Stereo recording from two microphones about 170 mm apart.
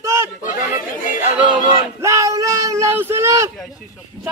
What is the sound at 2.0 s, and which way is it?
Speech, 20° right (ahead or behind).